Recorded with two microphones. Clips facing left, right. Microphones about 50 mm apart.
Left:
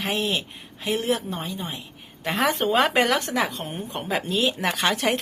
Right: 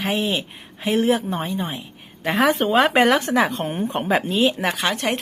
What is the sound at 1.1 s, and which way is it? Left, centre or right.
Speech, right.